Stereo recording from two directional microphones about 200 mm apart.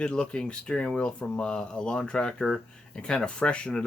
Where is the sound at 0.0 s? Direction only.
5° left (ahead or behind).